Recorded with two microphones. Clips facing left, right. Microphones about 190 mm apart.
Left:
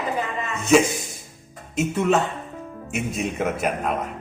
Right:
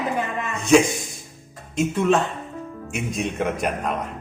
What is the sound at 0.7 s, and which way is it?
A man's voice, 5° left (ahead or behind).